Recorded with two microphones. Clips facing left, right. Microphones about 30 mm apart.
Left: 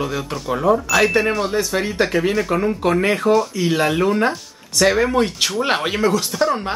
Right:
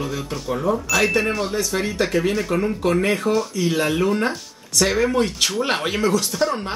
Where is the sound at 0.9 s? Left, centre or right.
Centre.